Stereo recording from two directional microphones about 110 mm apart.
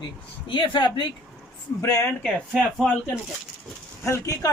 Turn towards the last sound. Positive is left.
turn(degrees=30)  # may be behind; listen again after turning